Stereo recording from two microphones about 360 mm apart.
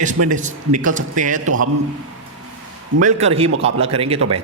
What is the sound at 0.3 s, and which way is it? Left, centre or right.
A man's voice, right.